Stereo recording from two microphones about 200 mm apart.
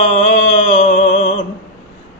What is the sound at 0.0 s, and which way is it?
Mantra, 30° left (ahead or behind).